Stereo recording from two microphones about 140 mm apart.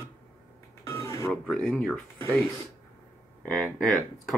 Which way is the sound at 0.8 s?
20° left (ahead or behind).